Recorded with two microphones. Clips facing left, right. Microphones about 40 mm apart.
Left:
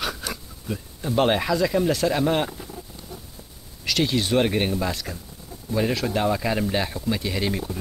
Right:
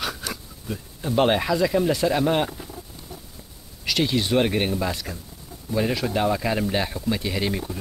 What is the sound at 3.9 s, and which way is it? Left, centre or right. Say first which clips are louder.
Speech: even; centre.